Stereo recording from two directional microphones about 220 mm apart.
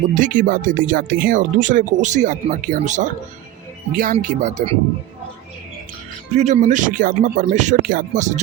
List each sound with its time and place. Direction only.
0.1 s speech: 35° right (ahead or behind)
6.3 s speech: 30° right (ahead or behind)